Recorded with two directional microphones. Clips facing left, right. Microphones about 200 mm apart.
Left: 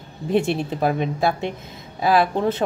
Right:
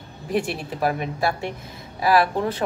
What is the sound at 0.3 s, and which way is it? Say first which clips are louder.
Speech: left 5 dB; 25° left (ahead or behind).